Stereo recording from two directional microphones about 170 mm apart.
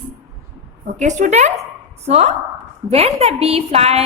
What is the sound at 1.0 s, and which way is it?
A woman's voice, 45° right (ahead or behind).